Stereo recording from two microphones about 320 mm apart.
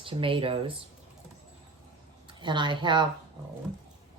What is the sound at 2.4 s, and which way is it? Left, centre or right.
Speech, centre.